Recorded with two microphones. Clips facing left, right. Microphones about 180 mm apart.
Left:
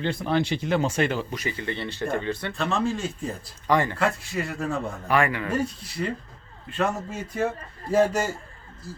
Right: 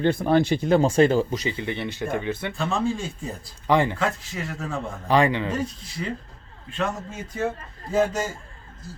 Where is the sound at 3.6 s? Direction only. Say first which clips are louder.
Right 2 dB; 15° right (ahead or behind).